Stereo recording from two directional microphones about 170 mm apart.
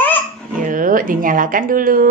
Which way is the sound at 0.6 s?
55° right (ahead or behind).